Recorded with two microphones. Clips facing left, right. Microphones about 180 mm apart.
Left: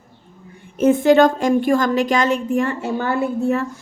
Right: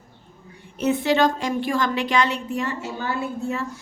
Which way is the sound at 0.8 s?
50° left (ahead or behind).